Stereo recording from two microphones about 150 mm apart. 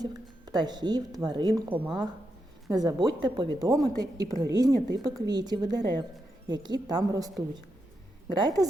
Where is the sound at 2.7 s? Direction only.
25° right (ahead or behind).